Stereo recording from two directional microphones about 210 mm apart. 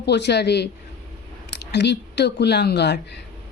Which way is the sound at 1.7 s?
55° left (ahead or behind).